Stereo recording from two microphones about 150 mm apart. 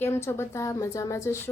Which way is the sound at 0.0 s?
15° left (ahead or behind).